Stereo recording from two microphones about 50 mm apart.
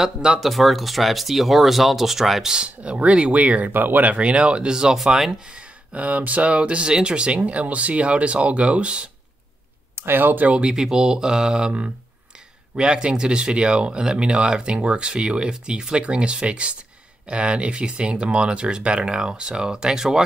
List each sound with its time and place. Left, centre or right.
0.0 s speech: centre
0.4 s speech: centre
2.5 s speech: right; by 5.3 s centre
5.5 s speech: right
9.9 s speech: right
10.6 s speech: centre